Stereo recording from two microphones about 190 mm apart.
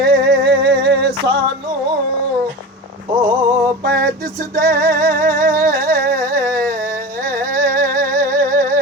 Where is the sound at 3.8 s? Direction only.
50° right (ahead or behind).